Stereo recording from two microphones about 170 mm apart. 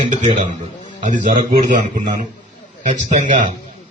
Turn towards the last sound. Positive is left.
turn(degrees=-50)  # may be behind; listen again after turning